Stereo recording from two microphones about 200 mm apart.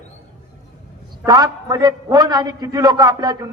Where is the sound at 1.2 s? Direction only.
20° right (ahead or behind).